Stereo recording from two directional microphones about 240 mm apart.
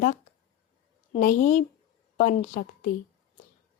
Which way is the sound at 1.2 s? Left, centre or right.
Left.